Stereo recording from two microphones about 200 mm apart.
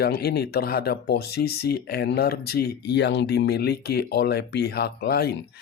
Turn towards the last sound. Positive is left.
turn(degrees=50)  # may be behind; listen again after turning